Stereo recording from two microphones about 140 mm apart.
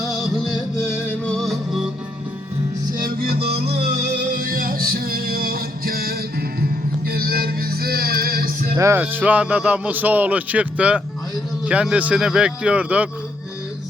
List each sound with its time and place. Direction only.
0.1 s music: centre (ahead or behind)
0.9 s music: 10° left (ahead or behind)
3.0 s music: 90° right
3.9 s music: 65° right (ahead or behind); by 8.4 s 90° right
8.8 s speech: 15° right (ahead or behind)